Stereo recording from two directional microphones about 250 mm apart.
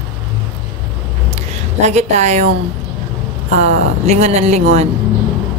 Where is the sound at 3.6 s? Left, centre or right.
Right.